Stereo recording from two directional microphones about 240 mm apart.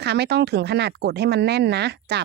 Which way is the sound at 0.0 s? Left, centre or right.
Right.